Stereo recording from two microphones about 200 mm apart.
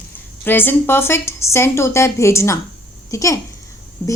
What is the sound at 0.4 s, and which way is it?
A woman's voice, 10° left (ahead or behind).